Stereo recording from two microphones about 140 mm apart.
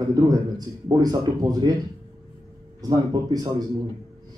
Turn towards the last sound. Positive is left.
turn(degrees=-30)  # may be behind; listen again after turning